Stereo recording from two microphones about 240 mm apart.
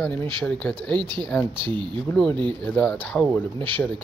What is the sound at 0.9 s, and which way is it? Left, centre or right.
Speech, centre.